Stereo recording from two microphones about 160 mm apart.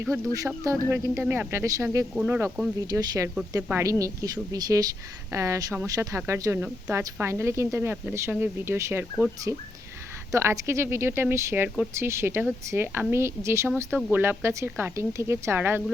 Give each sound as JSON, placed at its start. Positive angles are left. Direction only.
{"t": 0.0, "sound": "speech", "side_deg": -15}
{"t": 2.8, "sound": "a woman's voice", "side_deg": -25}
{"t": 10.3, "sound": "speech", "side_deg": -15}